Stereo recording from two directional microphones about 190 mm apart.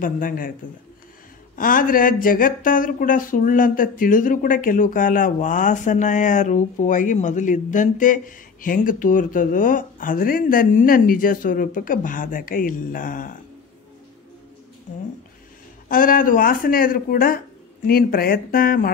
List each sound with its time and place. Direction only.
0.0 s speech: 45° left (ahead or behind)
1.6 s speech: 45° left (ahead or behind)
15.9 s speech: 45° left (ahead or behind)